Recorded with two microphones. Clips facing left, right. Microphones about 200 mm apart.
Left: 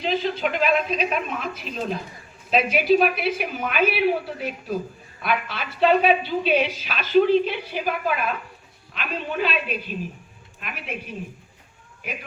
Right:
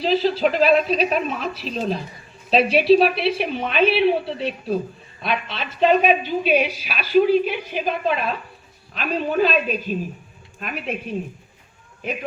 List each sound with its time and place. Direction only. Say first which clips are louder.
0.0 s a woman's voice: right 5 dB; 35° right (ahead or behind)
8.9 s a woman's voice: right 6 dB; 40° right (ahead or behind)